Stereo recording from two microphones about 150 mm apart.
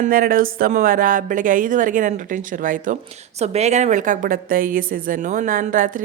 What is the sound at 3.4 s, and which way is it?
A woman's voice, 45° right (ahead or behind).